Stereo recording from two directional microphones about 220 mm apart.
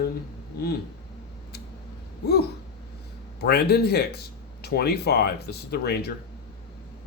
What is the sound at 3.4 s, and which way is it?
Speech, 45° left (ahead or behind).